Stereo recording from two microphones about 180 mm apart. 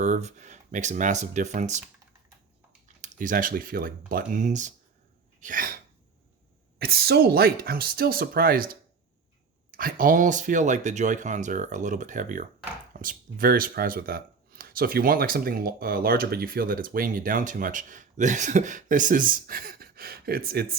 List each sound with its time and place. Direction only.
0.0 s speech: 40° right (ahead or behind)
2.8 s speech: 45° right (ahead or behind)
5.4 s sneeze: 50° right (ahead or behind)
6.7 s speech: 60° right (ahead or behind)